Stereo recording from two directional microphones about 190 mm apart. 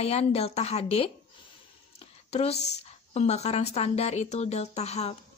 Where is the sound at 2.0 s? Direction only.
35° left (ahead or behind).